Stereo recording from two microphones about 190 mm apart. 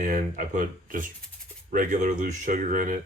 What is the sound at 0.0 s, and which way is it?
Speech, 45° right (ahead or behind).